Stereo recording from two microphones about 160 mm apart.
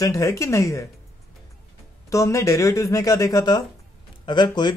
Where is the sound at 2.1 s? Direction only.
20° left (ahead or behind).